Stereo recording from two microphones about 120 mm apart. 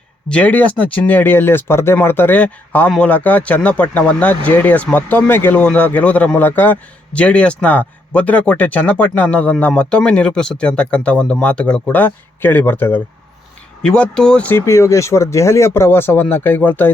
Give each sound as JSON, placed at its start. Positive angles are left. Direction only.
{"t": 0.3, "sound": "speech", "side_deg": 10}
{"t": 14.6, "sound": "speech", "side_deg": 25}